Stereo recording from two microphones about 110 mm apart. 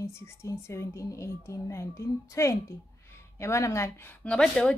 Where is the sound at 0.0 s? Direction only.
25° left (ahead or behind).